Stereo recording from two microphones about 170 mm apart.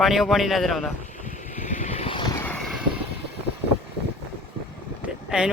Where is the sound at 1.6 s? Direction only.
45° left (ahead or behind).